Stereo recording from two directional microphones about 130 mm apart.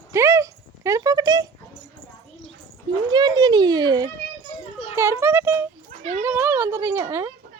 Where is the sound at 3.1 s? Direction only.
30° right (ahead or behind).